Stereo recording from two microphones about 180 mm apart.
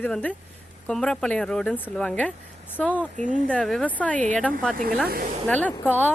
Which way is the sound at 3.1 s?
45° right (ahead or behind).